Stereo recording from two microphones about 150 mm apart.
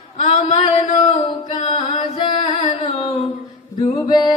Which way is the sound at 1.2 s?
35° left (ahead or behind).